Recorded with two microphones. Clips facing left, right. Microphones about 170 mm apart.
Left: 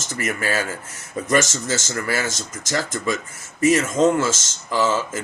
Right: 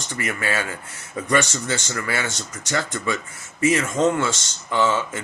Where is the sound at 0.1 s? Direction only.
40° left (ahead or behind).